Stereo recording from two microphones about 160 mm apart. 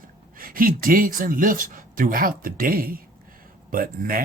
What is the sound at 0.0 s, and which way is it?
Speech, 60° right (ahead or behind).